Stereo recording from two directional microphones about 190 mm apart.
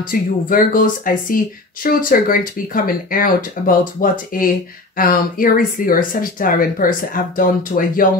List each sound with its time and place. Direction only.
0.1 s speech: 45° left (ahead or behind)